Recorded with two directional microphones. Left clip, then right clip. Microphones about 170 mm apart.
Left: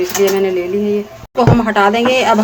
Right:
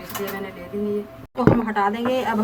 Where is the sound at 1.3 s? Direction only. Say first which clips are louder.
Left 8 dB; 30° left (ahead or behind).